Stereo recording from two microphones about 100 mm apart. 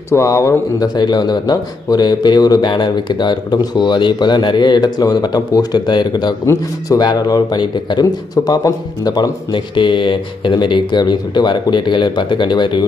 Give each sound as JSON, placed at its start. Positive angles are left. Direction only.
{"t": 0.1, "sound": "speech", "side_deg": 30}
{"t": 6.4, "sound": "speech", "side_deg": 30}
{"t": 7.0, "sound": "speech", "side_deg": 40}
{"t": 7.6, "sound": "speech", "side_deg": 50}